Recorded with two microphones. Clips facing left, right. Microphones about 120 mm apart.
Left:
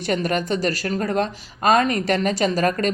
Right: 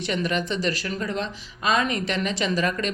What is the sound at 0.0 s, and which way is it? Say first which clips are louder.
Speech: left 3 dB; 45° left (ahead or behind).